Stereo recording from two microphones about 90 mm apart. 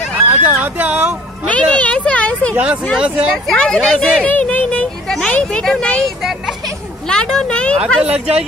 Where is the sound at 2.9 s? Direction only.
10° right (ahead or behind).